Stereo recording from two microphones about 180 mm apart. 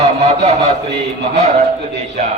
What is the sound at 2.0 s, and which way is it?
Speech, 40° right (ahead or behind).